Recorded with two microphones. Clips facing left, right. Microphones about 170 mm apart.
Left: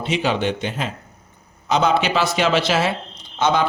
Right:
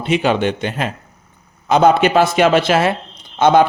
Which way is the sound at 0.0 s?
55° right (ahead or behind).